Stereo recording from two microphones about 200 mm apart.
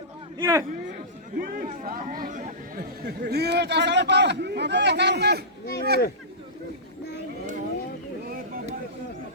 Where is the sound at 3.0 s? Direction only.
55° right (ahead or behind).